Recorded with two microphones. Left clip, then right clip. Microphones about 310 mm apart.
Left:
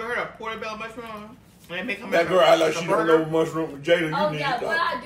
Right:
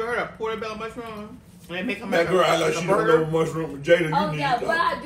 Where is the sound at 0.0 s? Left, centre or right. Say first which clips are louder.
Right 2 dB; centre.